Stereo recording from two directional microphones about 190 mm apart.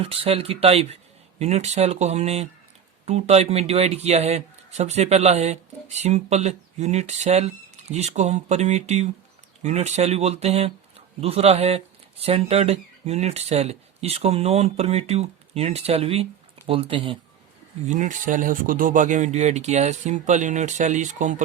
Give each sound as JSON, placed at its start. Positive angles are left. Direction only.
{"t": 0.0, "sound": "speech", "side_deg": -30}
{"t": 17.8, "sound": "speech", "side_deg": -40}